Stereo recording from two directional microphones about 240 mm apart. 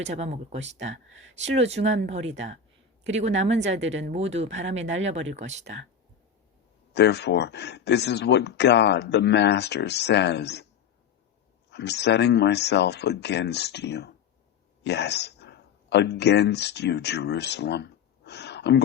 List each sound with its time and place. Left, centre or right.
0.1 s speech: right
6.9 s speech: left
11.7 s speech: left